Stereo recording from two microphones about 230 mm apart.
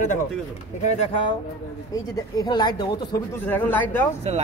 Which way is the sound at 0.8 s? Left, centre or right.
Left.